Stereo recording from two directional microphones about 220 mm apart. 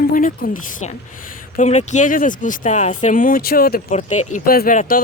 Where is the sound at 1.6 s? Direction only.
35° left (ahead or behind).